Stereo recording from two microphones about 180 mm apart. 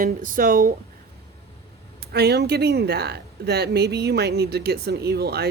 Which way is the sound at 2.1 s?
65° right (ahead or behind).